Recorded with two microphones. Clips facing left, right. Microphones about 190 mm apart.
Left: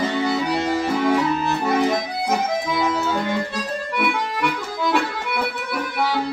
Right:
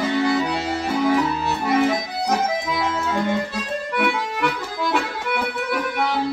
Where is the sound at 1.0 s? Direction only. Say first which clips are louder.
Right 1 dB; centre (ahead or behind).